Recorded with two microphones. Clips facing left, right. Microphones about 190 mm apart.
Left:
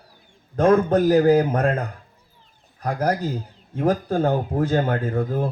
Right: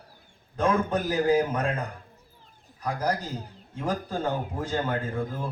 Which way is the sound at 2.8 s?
60° left (ahead or behind).